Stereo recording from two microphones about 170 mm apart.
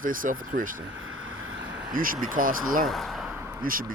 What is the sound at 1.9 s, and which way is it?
Speech, 55° right (ahead or behind).